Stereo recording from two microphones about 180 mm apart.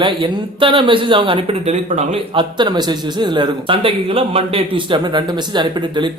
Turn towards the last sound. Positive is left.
turn(degrees=-25)  # may be behind; listen again after turning